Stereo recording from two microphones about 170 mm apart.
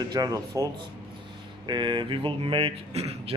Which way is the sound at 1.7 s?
25° right (ahead or behind).